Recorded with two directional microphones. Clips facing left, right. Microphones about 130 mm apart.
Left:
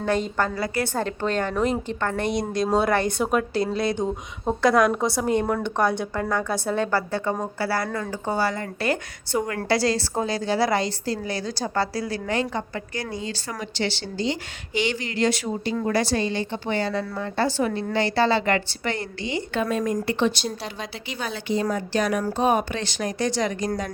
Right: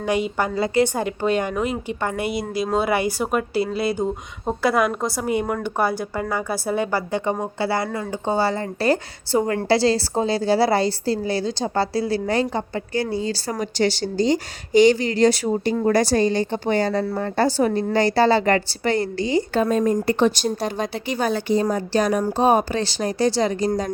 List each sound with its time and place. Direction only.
0.0 s speech: 10° right (ahead or behind)
1.0 s a woman's voice: 10° right (ahead or behind); by 23.9 s 35° right (ahead or behind)